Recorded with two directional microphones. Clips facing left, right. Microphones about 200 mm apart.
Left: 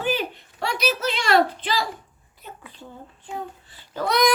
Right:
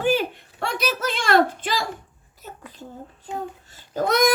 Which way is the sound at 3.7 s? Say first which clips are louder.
Right 3 dB; 45° right (ahead or behind).